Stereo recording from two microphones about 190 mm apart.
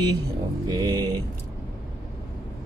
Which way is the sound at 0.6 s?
20° right (ahead or behind).